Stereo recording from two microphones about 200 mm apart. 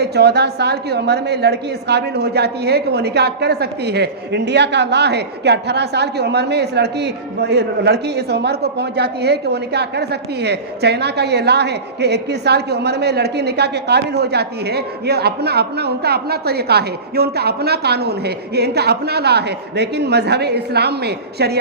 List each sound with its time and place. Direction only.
0.0 s a woman's voice: 55° right (ahead or behind)